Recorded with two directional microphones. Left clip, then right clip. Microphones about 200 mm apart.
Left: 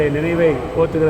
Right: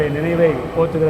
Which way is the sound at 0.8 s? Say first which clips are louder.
Even; 25° left (ahead or behind).